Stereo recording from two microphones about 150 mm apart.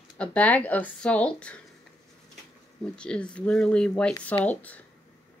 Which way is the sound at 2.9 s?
5° left (ahead or behind).